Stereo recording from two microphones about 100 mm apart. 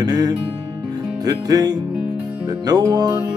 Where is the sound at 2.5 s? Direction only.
40° right (ahead or behind).